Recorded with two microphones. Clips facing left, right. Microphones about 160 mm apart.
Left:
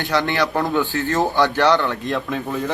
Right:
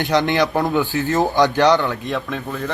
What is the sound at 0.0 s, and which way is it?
Speech, 20° right (ahead or behind).